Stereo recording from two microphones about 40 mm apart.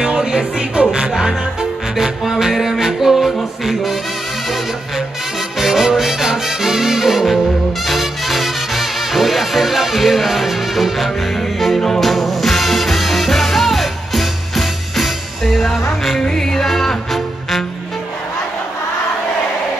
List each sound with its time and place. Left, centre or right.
0.0 s music: centre
5.6 s music: centre
16.2 s music: centre